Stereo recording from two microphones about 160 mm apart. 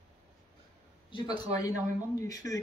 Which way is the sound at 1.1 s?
25° left (ahead or behind).